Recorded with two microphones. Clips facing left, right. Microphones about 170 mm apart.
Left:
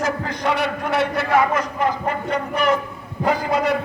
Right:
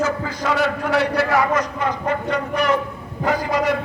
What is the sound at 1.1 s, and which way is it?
Speech, 20° left (ahead or behind).